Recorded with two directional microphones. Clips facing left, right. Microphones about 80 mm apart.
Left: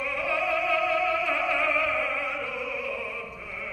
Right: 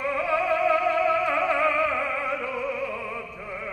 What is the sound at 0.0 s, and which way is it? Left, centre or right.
Music, right.